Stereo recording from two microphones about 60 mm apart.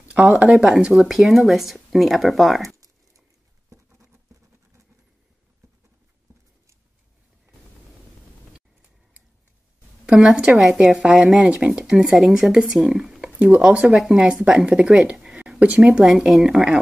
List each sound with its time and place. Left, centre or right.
0.3 s speech: right
0.6 s speech: centre
2.7 s a sound: right
10.1 s speech: centre
10.5 s speech: centre
11.5 s speech: centre
13.2 s a sound: right
13.6 s speech: centre
13.9 s speech: centre
16.3 s speech: centre